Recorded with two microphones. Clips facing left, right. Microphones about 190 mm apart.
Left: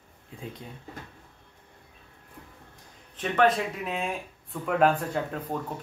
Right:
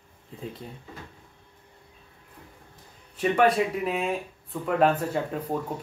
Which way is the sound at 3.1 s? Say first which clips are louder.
Right 2 dB; 10° right (ahead or behind).